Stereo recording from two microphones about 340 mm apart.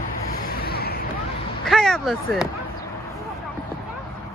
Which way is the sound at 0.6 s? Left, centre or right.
Left.